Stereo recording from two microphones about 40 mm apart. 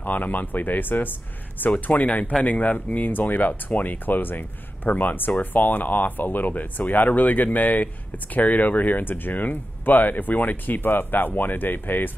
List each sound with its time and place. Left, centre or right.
0.0 s speech: left
1.9 s speech: left